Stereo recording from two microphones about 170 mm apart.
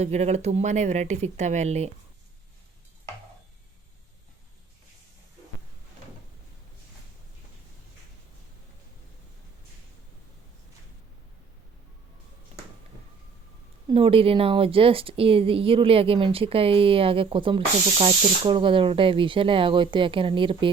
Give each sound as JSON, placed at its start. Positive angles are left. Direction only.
{"t": 0.0, "sound": "speech", "side_deg": -40}
{"t": 13.8, "sound": "speech", "side_deg": -35}